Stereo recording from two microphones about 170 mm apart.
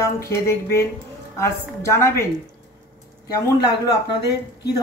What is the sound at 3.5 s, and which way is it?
Speech, 20° left (ahead or behind).